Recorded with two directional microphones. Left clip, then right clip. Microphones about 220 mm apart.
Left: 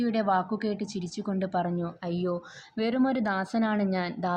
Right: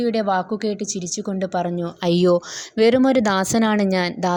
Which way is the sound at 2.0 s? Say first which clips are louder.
Right 14 dB; 45° right (ahead or behind).